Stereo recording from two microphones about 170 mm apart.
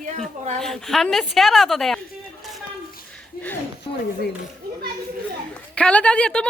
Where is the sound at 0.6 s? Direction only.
Centre (ahead or behind).